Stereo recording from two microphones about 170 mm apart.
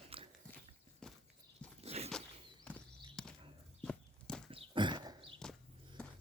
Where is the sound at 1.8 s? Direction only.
40° right (ahead or behind).